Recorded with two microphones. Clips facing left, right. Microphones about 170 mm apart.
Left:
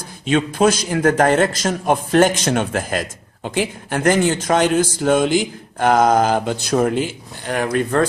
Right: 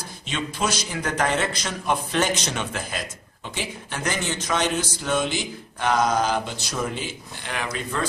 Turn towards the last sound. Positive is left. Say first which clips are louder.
# left 10 dB
turn(degrees=55)  # may be behind; listen again after turning